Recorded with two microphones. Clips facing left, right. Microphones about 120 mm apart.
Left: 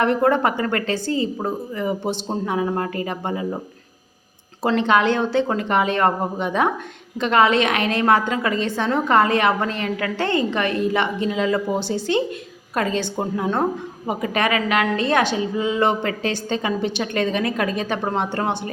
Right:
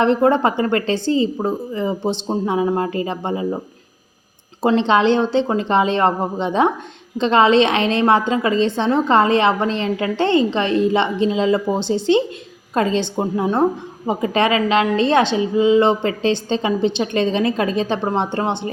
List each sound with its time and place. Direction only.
0.0 s a woman's voice: 25° right (ahead or behind)
4.6 s a woman's voice: 25° right (ahead or behind)